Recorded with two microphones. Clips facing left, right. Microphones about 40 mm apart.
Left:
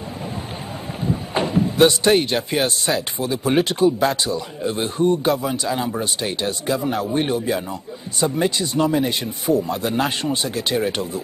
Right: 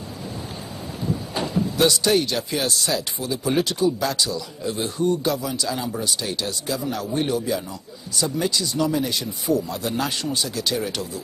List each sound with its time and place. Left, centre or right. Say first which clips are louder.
1.0 s speech: left 4 dB; left